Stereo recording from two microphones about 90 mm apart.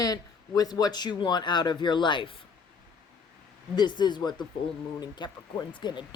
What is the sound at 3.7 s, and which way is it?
Speech, 55° left (ahead or behind).